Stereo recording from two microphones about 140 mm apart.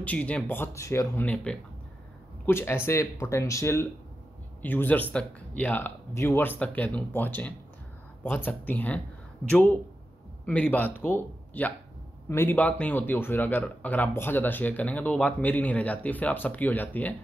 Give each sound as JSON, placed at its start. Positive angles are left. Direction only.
{"t": 0.0, "sound": "speech", "side_deg": 10}
{"t": 1.2, "sound": "a man's voice", "side_deg": 10}